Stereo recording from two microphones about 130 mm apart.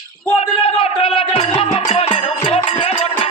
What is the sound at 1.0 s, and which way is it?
Speech, 45° left (ahead or behind).